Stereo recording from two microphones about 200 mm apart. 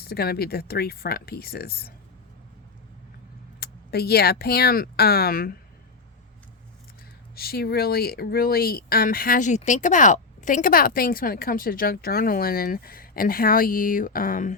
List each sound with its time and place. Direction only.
0.0 s speech: 50° left (ahead or behind)
3.6 s speech: 50° left (ahead or behind)
7.3 s speech: 50° left (ahead or behind)